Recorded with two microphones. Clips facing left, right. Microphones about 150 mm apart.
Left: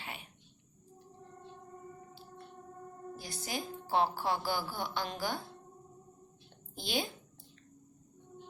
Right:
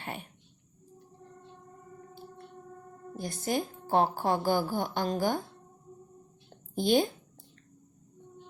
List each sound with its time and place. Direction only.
0.0 s speech: 50° right (ahead or behind)
3.2 s a woman's voice: 50° right (ahead or behind)
6.7 s a woman's voice: 50° right (ahead or behind)